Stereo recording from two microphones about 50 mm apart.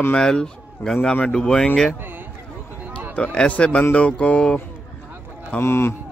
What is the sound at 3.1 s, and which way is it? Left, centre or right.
Speech, left.